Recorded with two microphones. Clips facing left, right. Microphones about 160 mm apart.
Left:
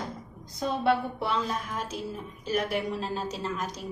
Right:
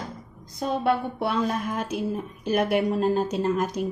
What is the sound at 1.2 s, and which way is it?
A woman's voice, 60° right (ahead or behind).